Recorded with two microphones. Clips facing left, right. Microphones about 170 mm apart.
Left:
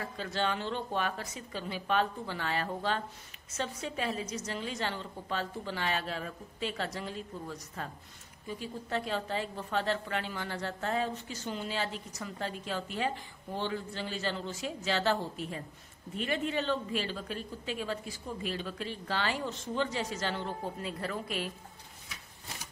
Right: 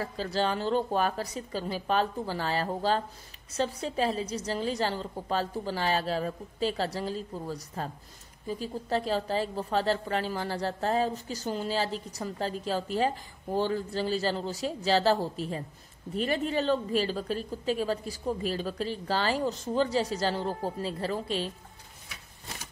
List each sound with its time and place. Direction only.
0.0 s a woman's voice: 35° right (ahead or behind)